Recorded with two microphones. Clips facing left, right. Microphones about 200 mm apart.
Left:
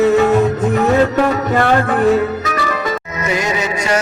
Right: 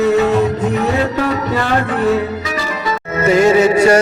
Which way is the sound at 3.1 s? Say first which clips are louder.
Right 13 dB; 30° right (ahead or behind).